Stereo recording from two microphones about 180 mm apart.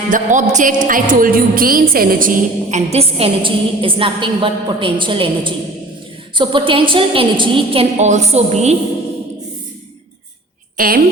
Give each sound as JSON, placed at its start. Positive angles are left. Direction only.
{"t": 0.1, "sound": "a woman's voice", "side_deg": -45}
{"t": 10.8, "sound": "a woman's voice", "side_deg": -55}